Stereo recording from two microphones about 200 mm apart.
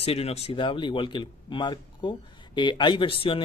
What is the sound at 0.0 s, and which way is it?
Speech, 30° left (ahead or behind).